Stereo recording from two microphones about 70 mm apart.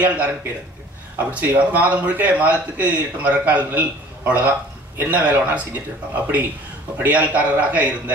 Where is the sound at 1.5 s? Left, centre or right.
Right.